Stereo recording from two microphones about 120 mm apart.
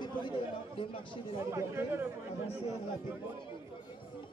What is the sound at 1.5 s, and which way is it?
Speech, 20° right (ahead or behind).